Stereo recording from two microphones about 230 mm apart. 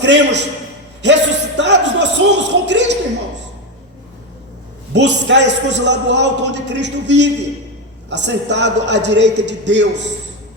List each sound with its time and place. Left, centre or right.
0.0 s a man's voice: right
4.9 s a man's voice: right